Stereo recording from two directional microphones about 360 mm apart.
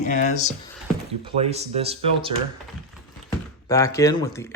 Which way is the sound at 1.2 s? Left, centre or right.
Centre.